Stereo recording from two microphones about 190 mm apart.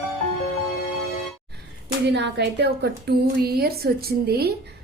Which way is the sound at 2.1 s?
65° right (ahead or behind).